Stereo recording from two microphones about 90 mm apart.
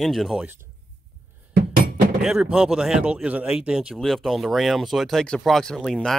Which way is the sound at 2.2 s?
5° right (ahead or behind).